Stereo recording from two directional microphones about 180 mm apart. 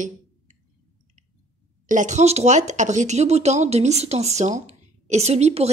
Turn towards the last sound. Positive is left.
turn(degrees=-35)  # may be behind; listen again after turning